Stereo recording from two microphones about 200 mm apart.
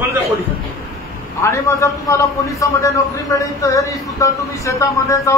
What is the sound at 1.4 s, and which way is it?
Speech, 15° left (ahead or behind).